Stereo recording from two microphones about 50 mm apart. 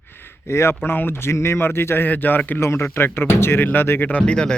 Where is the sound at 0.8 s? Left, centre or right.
Left.